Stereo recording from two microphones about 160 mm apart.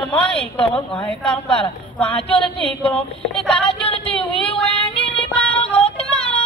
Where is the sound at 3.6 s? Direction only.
35° left (ahead or behind).